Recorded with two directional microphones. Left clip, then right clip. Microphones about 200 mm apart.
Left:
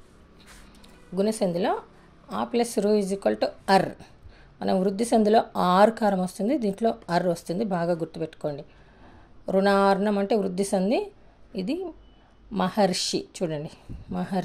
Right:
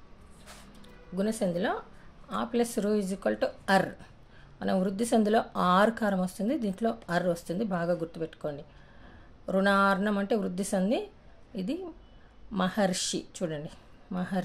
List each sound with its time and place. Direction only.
1.1 s speech: 30° left (ahead or behind)